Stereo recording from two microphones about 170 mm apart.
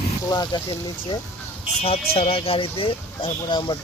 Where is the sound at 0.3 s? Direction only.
25° left (ahead or behind).